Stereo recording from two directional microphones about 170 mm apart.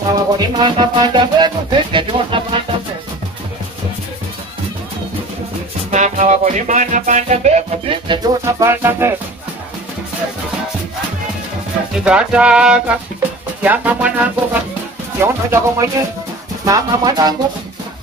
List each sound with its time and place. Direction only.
0.1 s music: 25° right (ahead or behind)
5.9 s music: 45° right (ahead or behind)
8.5 s speech: 15° right (ahead or behind)
12.0 s music: 5° right (ahead or behind)
13.6 s speech: 10° right (ahead or behind)